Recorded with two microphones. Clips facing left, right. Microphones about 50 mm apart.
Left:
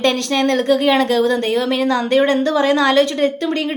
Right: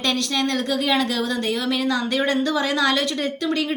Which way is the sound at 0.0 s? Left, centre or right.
Left.